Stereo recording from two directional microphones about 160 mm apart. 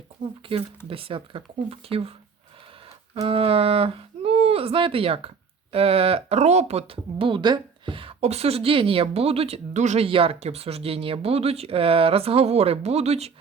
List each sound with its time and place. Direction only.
0.2 s speech: 30° right (ahead or behind)
3.2 s speech: 35° right (ahead or behind)